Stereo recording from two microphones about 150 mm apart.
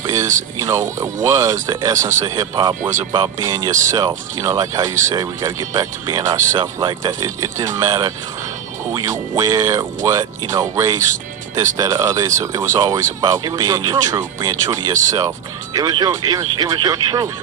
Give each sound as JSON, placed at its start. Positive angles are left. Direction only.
{"t": 0.6, "sound": "speech", "side_deg": -20}